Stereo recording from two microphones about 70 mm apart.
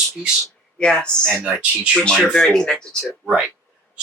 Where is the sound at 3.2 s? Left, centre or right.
Centre.